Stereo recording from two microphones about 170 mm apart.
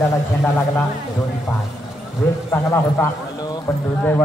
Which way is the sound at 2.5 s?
15° left (ahead or behind).